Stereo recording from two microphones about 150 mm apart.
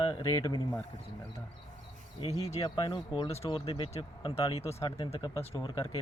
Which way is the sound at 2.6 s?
30° left (ahead or behind).